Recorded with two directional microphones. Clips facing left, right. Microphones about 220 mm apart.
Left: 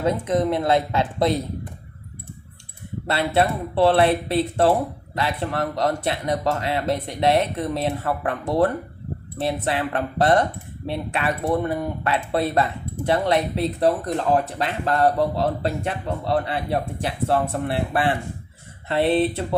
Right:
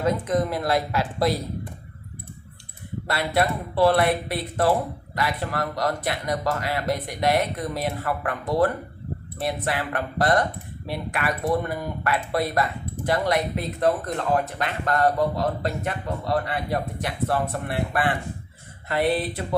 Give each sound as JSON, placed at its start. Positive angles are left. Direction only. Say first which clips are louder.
{"t": 0.0, "sound": "speech", "louder": "left 2 dB", "side_deg": 25}
{"t": 3.1, "sound": "speech", "louder": "left 3 dB", "side_deg": 25}